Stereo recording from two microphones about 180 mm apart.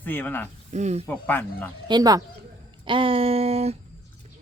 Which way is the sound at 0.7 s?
40° right (ahead or behind).